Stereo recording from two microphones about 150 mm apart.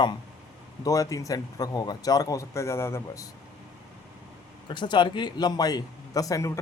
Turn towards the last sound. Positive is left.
turn(degrees=20)  # may be behind; listen again after turning